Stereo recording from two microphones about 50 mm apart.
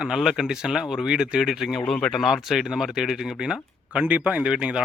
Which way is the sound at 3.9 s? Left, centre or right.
Right.